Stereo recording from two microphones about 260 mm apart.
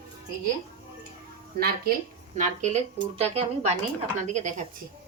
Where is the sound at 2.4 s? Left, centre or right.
Right.